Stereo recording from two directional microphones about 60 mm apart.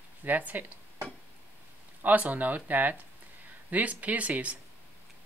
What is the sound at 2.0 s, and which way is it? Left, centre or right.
Speech, right.